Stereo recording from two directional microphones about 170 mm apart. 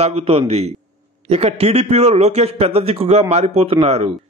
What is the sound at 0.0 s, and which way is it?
A man's voice, 35° right (ahead or behind).